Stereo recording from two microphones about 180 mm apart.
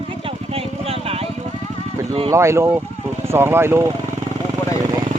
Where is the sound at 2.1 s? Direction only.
30° right (ahead or behind).